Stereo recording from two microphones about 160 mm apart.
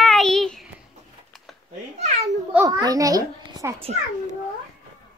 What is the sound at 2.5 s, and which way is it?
A child's voice, 20° right (ahead or behind).